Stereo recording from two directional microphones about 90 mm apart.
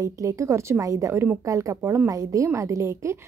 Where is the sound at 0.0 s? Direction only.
35° right (ahead or behind).